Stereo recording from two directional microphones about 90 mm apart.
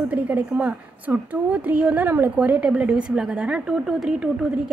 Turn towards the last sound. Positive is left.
turn(degrees=-10)  # may be behind; listen again after turning